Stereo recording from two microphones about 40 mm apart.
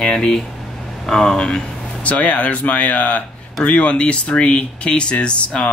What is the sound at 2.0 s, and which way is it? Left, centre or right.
Speech, left.